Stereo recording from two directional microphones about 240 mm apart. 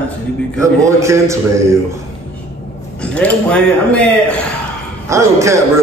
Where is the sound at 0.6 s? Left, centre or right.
Centre.